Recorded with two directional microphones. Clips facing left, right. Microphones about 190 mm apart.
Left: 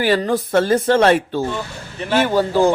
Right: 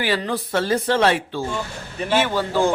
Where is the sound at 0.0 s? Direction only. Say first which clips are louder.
Left 6 dB; 45° left (ahead or behind).